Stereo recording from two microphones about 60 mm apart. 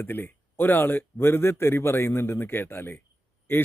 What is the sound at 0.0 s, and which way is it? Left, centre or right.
Speech, left.